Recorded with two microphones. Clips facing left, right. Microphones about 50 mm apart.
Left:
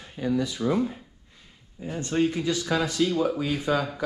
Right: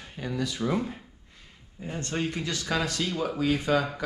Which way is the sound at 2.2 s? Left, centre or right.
Centre.